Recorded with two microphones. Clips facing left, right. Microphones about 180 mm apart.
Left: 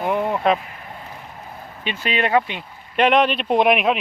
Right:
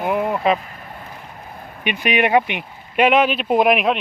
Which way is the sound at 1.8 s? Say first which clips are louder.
Right 4 dB; 15° right (ahead or behind).